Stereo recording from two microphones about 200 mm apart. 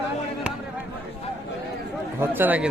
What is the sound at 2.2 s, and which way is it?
Speech, 10° right (ahead or behind).